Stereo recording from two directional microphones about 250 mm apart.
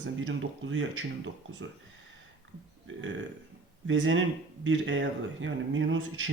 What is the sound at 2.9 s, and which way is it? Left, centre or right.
Speech, right.